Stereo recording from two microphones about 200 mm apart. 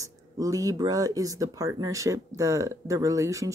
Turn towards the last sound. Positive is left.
turn(degrees=-15)  # may be behind; listen again after turning